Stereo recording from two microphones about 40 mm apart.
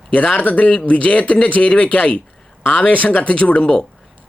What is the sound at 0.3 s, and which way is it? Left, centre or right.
Speech, left.